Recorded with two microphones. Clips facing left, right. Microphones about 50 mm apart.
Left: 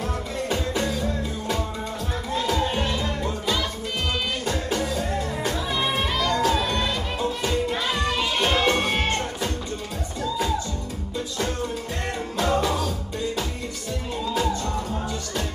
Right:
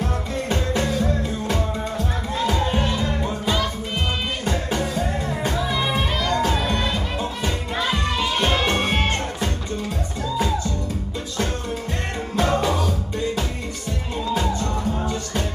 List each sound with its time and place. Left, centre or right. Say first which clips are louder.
0.5 s music: right 3 dB; right
4.5 s music: right 3 dB; right
6.3 s music: right 1 dB; right
12.4 s music: right 2 dB; right
14.3 s music: right 1 dB; right